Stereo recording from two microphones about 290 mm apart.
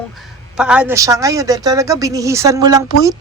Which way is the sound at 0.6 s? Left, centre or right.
Centre.